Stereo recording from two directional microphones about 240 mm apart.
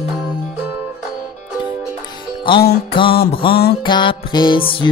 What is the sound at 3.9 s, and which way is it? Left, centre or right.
Music, centre.